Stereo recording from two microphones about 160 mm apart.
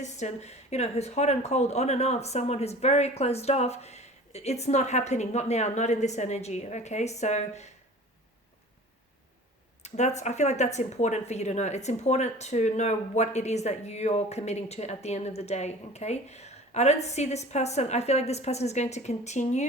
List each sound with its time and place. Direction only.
0.0 s speech: 45° left (ahead or behind)
9.8 s speech: 45° left (ahead or behind)